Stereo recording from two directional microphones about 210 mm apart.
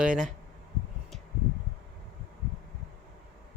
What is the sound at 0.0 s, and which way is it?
Speech, 5° right (ahead or behind).